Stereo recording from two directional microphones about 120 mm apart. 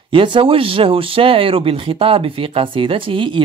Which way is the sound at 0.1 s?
45° right (ahead or behind).